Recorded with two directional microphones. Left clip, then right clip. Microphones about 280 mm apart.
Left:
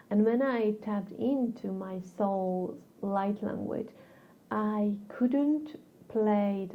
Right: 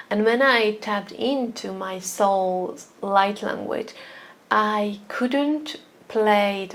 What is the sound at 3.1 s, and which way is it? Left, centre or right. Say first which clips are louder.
A woman's voice: right 12 dB; centre.